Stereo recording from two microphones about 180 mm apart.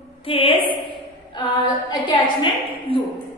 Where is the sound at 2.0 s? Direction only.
25° left (ahead or behind).